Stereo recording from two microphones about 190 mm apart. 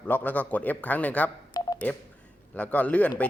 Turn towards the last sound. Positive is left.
turn(degrees=5)  # may be behind; listen again after turning